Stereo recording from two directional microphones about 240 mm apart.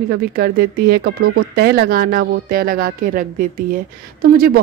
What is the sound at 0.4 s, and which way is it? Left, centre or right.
Speech, right.